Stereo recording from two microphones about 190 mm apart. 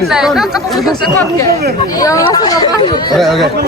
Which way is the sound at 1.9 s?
20° left (ahead or behind).